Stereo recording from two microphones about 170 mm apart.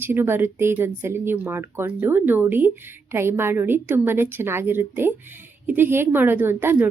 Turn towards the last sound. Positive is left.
turn(degrees=-10)  # may be behind; listen again after turning